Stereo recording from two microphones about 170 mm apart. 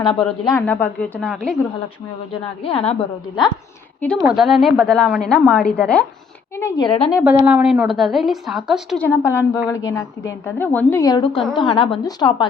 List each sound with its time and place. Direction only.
0.0 s a woman's voice: 30° left (ahead or behind)
0.5 s a woman's voice: 10° left (ahead or behind)
2.4 s a woman's voice: 35° left (ahead or behind)
4.3 s a woman's voice: centre (ahead or behind)
6.6 s a woman's voice: 20° left (ahead or behind)
7.3 s a woman's voice: 10° right (ahead or behind)
9.0 s a woman's voice: 15° left (ahead or behind)